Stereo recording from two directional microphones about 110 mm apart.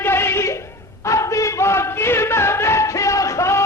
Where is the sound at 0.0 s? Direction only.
20° left (ahead or behind).